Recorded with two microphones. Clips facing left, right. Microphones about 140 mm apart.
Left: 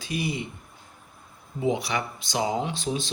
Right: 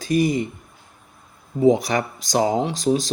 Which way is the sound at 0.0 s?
45° right (ahead or behind).